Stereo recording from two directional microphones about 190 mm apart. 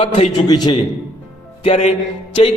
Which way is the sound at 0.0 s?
30° left (ahead or behind).